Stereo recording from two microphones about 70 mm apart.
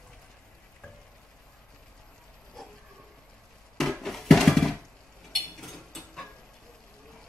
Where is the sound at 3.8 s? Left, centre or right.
Centre.